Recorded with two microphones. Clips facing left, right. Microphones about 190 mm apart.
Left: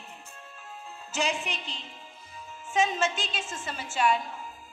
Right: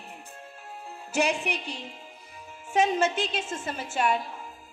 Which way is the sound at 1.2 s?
65° right (ahead or behind).